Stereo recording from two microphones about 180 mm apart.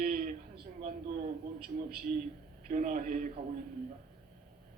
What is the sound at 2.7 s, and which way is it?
Speech, 45° right (ahead or behind).